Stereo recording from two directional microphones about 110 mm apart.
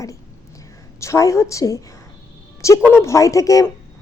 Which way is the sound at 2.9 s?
25° left (ahead or behind).